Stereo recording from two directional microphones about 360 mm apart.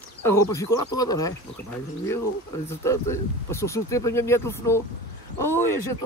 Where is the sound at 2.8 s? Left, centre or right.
Centre.